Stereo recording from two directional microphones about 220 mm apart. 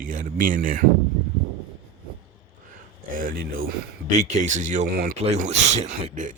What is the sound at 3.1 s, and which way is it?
Speech, 40° right (ahead or behind).